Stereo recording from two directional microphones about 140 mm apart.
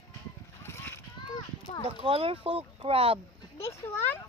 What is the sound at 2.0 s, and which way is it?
Speech, 45° right (ahead or behind).